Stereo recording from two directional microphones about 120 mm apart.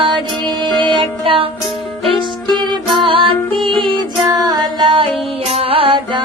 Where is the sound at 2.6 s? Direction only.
40° right (ahead or behind).